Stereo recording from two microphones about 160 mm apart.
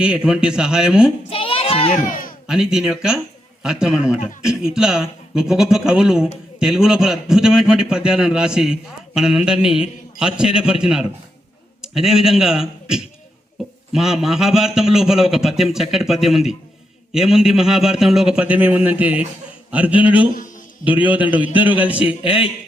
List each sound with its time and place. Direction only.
0.0 s a man's voice: 5° right (ahead or behind)
1.3 s a sound: 35° left (ahead or behind)
2.5 s a man's voice: 5° right (ahead or behind)